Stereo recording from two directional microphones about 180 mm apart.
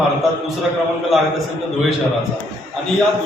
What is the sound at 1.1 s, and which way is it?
Speech, centre (ahead or behind).